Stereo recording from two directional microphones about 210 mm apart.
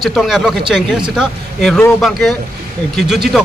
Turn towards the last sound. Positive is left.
turn(degrees=0)  # may be behind; listen again after turning